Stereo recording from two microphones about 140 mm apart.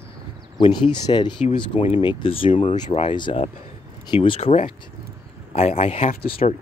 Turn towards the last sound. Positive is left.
turn(degrees=55)  # may be behind; listen again after turning